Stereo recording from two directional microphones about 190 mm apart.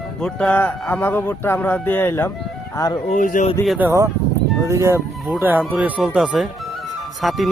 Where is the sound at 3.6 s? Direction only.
10° right (ahead or behind).